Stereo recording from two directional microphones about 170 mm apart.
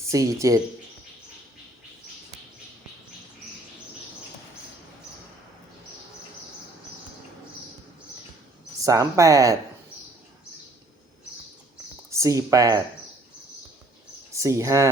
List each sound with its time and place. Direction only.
0.1 s speech: 20° right (ahead or behind)
8.8 s speech: 20° right (ahead or behind)
12.1 s speech: 20° right (ahead or behind)
14.3 s speech: 15° right (ahead or behind)